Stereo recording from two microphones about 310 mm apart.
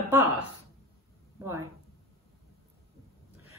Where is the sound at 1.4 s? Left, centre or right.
Centre.